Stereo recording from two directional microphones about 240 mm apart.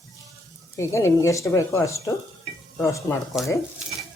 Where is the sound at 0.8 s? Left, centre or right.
Centre.